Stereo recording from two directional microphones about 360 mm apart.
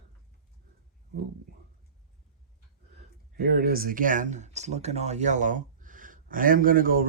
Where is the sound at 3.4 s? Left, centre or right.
Right.